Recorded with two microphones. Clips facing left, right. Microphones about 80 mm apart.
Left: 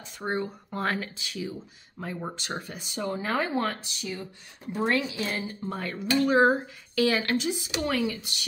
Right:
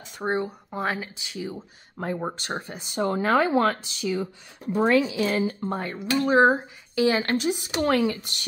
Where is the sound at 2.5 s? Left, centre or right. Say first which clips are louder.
Right 4 dB; right.